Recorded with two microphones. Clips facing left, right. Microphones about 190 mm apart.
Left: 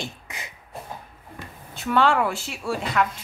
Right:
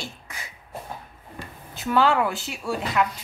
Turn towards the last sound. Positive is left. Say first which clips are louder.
# even
turn(degrees=0)  # may be behind; listen again after turning